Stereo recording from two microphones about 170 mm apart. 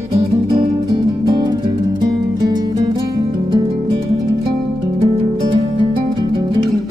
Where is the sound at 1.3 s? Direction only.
25° right (ahead or behind).